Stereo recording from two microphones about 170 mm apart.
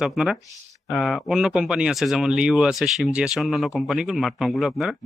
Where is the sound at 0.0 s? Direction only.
Centre (ahead or behind).